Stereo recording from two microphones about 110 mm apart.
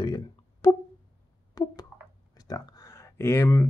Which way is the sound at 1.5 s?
35° left (ahead or behind).